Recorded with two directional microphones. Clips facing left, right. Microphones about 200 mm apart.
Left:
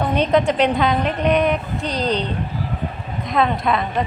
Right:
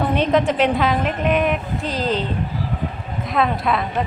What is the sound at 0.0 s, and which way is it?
A woman's voice, centre (ahead or behind).